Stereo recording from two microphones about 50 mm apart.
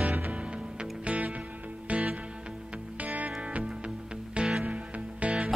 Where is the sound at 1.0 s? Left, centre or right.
Right.